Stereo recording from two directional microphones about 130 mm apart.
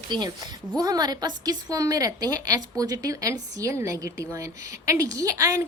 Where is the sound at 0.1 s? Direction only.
35° right (ahead or behind).